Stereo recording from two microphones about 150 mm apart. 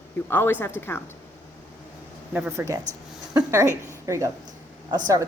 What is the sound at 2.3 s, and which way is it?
Speech, 15° right (ahead or behind).